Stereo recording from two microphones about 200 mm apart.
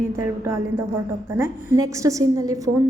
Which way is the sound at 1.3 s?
10° right (ahead or behind).